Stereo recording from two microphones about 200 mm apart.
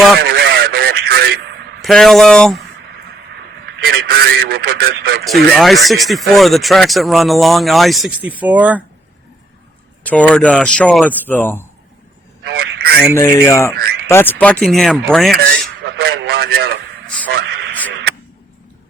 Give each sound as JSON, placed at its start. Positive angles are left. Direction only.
{"t": 0.2, "sound": "radio", "side_deg": -50}
{"t": 1.8, "sound": "speech", "side_deg": 0}
{"t": 3.8, "sound": "speech", "side_deg": -50}
{"t": 5.2, "sound": "speech", "side_deg": 0}
{"t": 10.0, "sound": "speech", "side_deg": 5}
{"t": 12.5, "sound": "telephone", "side_deg": -50}
{"t": 13.1, "sound": "speech", "side_deg": 15}
{"t": 15.8, "sound": "a man's voice", "side_deg": -50}
{"t": 17.3, "sound": "a sound", "side_deg": -55}